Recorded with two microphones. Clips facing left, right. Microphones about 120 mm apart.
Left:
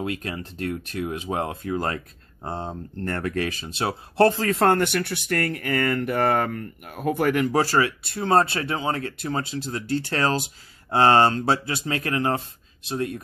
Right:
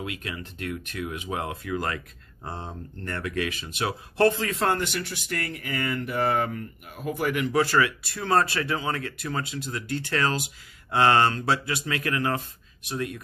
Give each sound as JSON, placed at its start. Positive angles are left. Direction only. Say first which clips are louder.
{"t": 0.0, "sound": "speech", "louder": "left 5 dB", "side_deg": 35}